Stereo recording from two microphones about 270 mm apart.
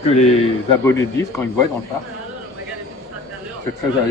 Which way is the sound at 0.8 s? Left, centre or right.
Centre.